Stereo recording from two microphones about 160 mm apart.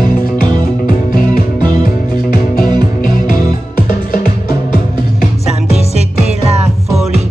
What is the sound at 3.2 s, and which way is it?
Music, 65° left (ahead or behind).